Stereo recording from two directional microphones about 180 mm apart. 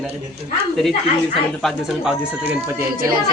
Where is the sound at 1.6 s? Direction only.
5° right (ahead or behind).